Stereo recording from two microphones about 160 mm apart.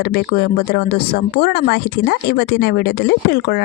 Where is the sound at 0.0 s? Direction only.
75° left (ahead or behind).